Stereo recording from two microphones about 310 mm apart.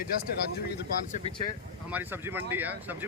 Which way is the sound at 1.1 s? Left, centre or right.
Left.